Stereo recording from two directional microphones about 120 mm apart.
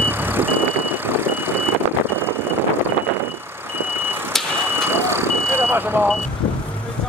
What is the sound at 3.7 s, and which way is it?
Vehicle, 20° right (ahead or behind).